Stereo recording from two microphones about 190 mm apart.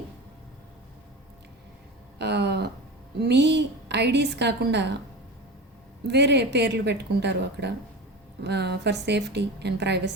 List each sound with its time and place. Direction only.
2.1 s a sound: 65° right (ahead or behind)
3.2 s a woman's voice: 65° right (ahead or behind)
6.1 s a woman's voice: 65° right (ahead or behind)